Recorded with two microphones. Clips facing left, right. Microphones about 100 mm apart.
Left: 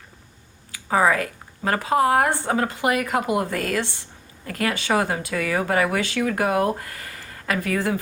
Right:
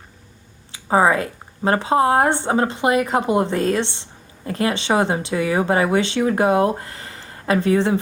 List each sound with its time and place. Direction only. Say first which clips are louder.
0.7 s a woman's voice: right 3 dB; 25° right (ahead or behind)